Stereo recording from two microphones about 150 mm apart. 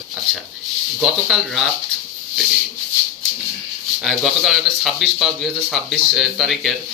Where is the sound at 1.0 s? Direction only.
Centre (ahead or behind).